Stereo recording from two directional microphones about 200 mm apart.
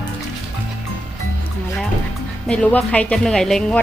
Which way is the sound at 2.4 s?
5° left (ahead or behind).